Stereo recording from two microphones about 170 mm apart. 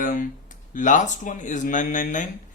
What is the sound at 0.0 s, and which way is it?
Speech, 50° left (ahead or behind).